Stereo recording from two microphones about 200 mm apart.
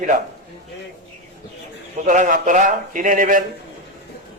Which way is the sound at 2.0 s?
40° right (ahead or behind).